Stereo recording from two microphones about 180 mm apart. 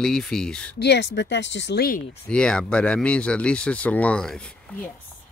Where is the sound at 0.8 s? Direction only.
70° left (ahead or behind).